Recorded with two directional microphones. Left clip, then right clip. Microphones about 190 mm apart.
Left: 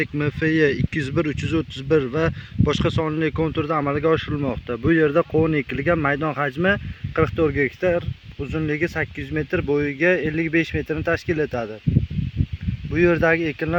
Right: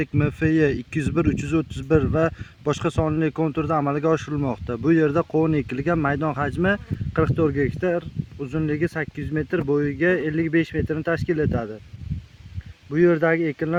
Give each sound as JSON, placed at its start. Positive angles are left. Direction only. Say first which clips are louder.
{"t": 0.0, "sound": "speech", "louder": "left 1 dB", "side_deg": -55}
{"t": 13.0, "sound": "speech", "louder": "left 1 dB", "side_deg": -25}